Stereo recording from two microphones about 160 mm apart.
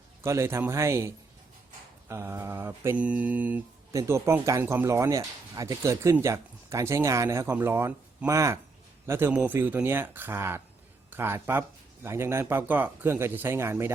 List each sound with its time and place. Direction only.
0.2 s speech: 15° right (ahead or behind)